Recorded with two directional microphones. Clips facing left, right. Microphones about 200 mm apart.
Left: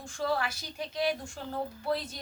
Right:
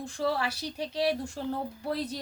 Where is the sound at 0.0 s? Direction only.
35° right (ahead or behind).